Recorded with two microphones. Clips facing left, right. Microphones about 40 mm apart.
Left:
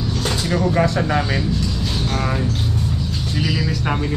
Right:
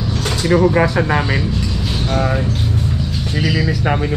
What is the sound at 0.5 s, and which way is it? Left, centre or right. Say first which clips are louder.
Speech: right 6 dB; right.